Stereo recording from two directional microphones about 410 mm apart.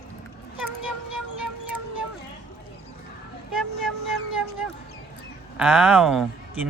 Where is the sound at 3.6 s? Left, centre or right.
Centre.